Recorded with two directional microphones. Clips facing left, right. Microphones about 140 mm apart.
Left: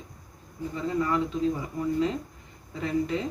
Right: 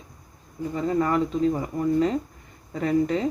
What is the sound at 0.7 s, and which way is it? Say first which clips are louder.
Speech: right 4 dB; 50° right (ahead or behind).